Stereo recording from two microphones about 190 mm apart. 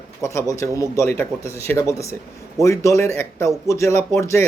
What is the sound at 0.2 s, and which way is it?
Speech, 15° left (ahead or behind).